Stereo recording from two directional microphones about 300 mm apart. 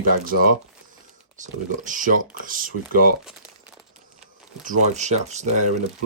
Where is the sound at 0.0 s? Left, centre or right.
Right.